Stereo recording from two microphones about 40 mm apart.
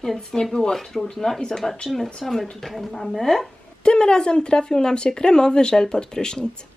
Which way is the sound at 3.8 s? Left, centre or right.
Left.